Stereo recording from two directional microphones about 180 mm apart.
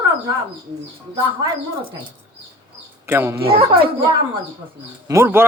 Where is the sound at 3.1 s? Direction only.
10° right (ahead or behind).